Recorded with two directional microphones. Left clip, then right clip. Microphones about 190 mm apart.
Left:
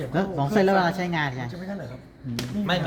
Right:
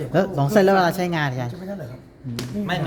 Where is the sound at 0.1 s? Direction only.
65° right (ahead or behind).